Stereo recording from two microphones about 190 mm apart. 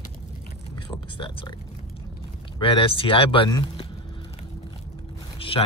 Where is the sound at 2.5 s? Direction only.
25° left (ahead or behind).